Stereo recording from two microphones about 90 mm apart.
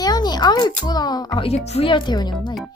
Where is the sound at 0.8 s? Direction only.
50° left (ahead or behind).